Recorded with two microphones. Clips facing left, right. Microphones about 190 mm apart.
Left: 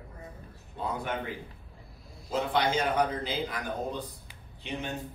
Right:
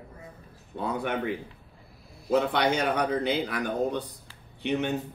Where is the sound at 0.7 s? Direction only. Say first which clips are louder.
Right 4 dB; 65° right (ahead or behind).